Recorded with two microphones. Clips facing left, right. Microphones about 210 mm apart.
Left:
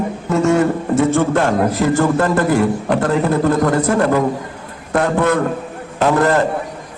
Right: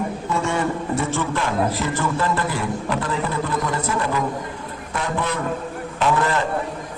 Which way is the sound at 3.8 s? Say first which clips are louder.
Left 9 dB; 70° left (ahead or behind).